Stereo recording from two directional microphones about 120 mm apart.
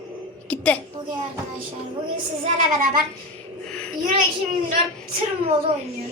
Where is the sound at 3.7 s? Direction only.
5° left (ahead or behind).